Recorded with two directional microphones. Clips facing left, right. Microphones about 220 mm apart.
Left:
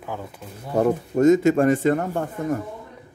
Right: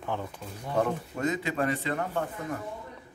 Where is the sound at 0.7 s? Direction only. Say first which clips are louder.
Left 9 dB; 45° left (ahead or behind).